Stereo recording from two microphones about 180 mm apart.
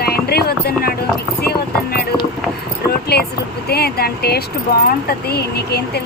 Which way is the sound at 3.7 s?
60° left (ahead or behind).